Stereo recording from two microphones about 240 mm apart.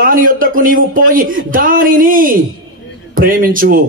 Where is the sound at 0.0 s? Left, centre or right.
Right.